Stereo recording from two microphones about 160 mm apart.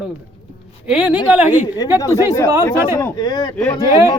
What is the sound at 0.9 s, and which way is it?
Speech, 5° right (ahead or behind).